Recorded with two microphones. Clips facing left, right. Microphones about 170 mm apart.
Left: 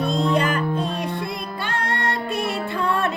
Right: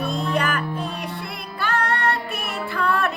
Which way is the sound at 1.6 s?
20° left (ahead or behind).